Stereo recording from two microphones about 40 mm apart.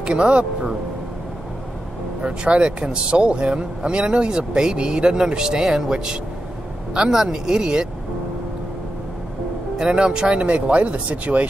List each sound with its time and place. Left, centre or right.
0.0 s speech: right
2.2 s speech: right
9.8 s speech: centre; by 11.4 s right